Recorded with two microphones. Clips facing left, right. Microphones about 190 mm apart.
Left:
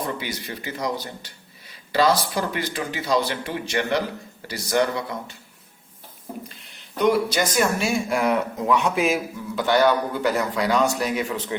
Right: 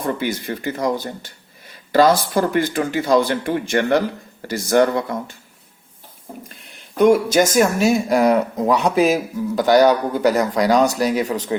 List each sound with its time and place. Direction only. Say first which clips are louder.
0.0 s speech: right 6 dB; 50° right (ahead or behind)
7.0 s speech: right 6 dB; 45° right (ahead or behind)